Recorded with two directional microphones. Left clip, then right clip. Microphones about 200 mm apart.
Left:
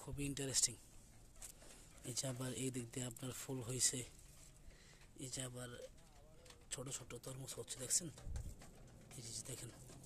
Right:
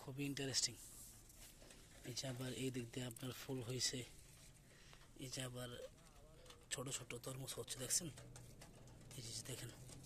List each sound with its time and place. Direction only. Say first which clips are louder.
0.0 s speech: even; 20° left (ahead or behind)
2.1 s speech: left 2 dB; 25° left (ahead or behind)
5.2 s speech: even; 15° left (ahead or behind)
9.2 s a sound: even; 10° left (ahead or behind)